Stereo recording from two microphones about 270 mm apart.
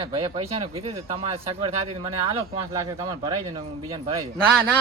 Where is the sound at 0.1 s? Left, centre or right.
Centre.